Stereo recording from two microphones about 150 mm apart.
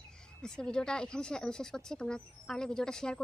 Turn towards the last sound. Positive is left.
turn(degrees=5)  # may be behind; listen again after turning